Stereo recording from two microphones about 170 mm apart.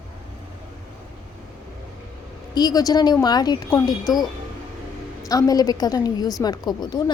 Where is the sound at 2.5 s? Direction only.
25° left (ahead or behind).